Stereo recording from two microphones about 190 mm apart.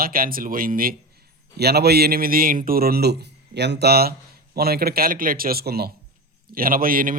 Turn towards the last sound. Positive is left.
turn(degrees=-45)  # may be behind; listen again after turning